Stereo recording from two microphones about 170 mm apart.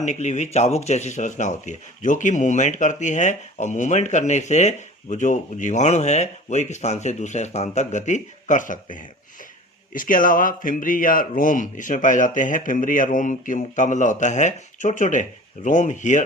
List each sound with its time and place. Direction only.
0.0 s speech: 45° left (ahead or behind)